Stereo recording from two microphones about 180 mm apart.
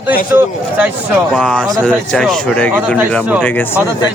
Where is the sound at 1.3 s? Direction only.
5° left (ahead or behind).